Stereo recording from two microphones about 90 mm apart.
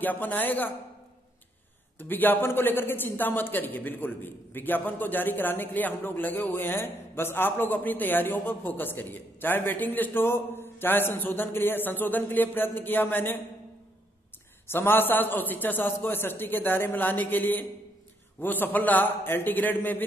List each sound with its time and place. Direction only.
0.0 s a man's voice: 20° left (ahead or behind)
2.0 s a man's voice: 20° left (ahead or behind)
14.7 s a man's voice: 25° left (ahead or behind)